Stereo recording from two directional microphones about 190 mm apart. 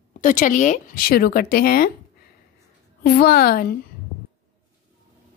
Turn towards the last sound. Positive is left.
turn(degrees=50)  # may be behind; listen again after turning